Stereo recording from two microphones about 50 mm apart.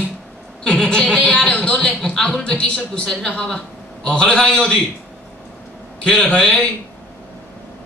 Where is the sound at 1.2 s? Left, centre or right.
Centre.